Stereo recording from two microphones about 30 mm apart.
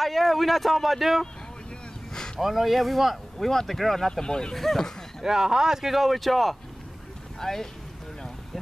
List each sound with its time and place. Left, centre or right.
0.0 s speech: centre
2.1 s a sound: left
2.4 s speech: centre
3.3 s speech: centre
4.1 s speech: left
4.6 s speech: centre
5.2 s speech: centre
5.9 s speech: centre
7.3 s speech: centre